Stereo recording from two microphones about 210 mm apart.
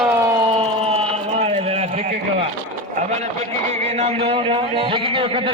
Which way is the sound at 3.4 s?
30° right (ahead or behind).